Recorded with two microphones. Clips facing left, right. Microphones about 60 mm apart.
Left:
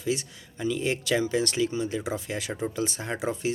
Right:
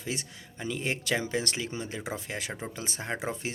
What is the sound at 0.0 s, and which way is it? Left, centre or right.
Speech, right.